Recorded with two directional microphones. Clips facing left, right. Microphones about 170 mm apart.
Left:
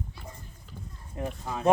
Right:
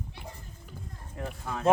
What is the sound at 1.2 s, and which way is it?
Speech, 15° left (ahead or behind).